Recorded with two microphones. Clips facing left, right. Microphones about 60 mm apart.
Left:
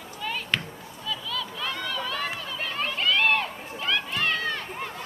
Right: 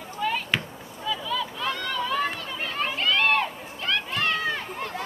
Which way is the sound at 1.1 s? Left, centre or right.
Centre.